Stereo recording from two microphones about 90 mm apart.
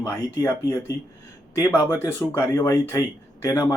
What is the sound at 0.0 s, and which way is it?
Speech, 35° left (ahead or behind).